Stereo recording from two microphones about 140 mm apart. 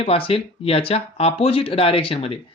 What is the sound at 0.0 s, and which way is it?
Speech, 40° left (ahead or behind).